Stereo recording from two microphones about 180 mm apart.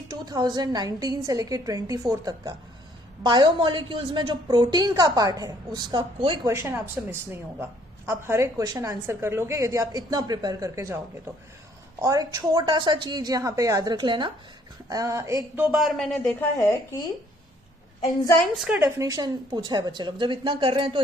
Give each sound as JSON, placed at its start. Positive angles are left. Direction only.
{"t": 0.1, "sound": "a woman's voice", "side_deg": -20}
{"t": 6.5, "sound": "a woman's voice", "side_deg": -15}
{"t": 12.0, "sound": "a woman's voice", "side_deg": -20}
{"t": 15.5, "sound": "a man's voice", "side_deg": -5}
{"t": 16.6, "sound": "a woman's voice", "side_deg": 20}
{"t": 18.5, "sound": "a man's voice", "side_deg": 0}
{"t": 18.8, "sound": "a woman's voice", "side_deg": -15}